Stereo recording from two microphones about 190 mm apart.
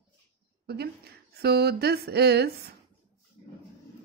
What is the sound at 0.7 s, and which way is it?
A woman's voice, 55° right (ahead or behind).